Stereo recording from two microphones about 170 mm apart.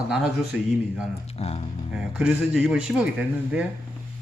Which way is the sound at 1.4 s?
35° left (ahead or behind).